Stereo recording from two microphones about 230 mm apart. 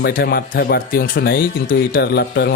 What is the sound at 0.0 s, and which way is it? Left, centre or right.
A man's voice, left.